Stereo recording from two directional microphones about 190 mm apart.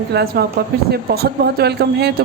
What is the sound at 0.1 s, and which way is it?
Speech, 60° right (ahead or behind).